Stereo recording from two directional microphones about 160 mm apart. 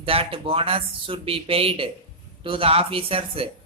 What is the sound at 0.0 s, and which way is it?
A man's voice, 35° right (ahead or behind).